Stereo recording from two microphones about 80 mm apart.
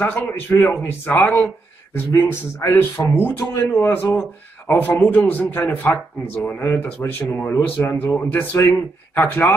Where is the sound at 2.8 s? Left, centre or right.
Left.